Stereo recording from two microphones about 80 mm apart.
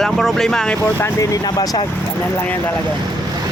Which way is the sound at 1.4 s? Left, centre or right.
Left.